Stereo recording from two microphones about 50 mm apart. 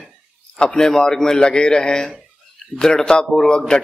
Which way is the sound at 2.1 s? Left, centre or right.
Centre.